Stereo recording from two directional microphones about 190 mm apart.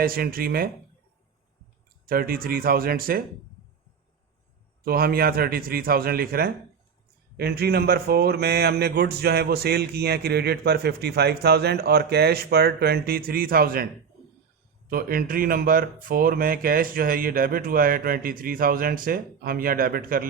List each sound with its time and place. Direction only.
0.0 s speech: 50° right (ahead or behind)
2.0 s speech: 50° right (ahead or behind)
4.8 s speech: 50° right (ahead or behind)
14.8 s speech: 50° right (ahead or behind)